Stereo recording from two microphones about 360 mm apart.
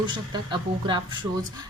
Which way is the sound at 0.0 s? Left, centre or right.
Centre.